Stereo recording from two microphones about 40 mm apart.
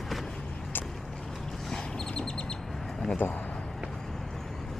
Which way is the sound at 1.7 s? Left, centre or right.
Centre.